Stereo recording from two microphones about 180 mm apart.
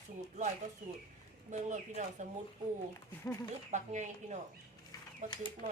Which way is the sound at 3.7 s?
40° right (ahead or behind).